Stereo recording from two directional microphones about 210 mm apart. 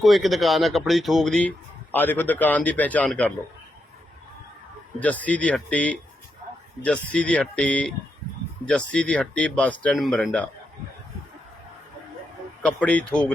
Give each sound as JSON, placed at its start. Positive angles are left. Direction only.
{"t": 0.0, "sound": "speech", "side_deg": 0}
{"t": 4.9, "sound": "speech", "side_deg": 5}
{"t": 12.6, "sound": "speech", "side_deg": 5}